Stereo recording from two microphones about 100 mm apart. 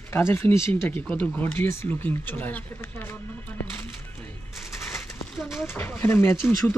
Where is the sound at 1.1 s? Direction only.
15° left (ahead or behind).